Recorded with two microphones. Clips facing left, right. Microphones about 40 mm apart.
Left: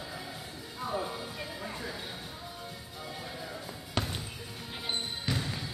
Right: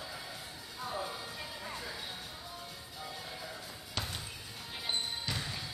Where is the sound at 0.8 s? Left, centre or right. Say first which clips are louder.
Left 4 dB; centre.